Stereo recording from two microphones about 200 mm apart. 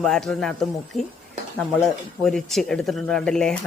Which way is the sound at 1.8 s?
Centre (ahead or behind).